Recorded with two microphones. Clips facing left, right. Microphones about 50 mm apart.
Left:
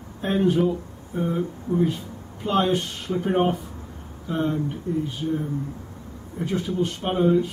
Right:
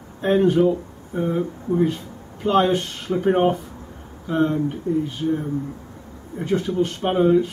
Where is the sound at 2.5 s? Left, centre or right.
Centre.